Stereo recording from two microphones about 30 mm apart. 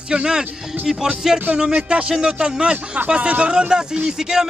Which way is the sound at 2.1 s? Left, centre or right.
Right.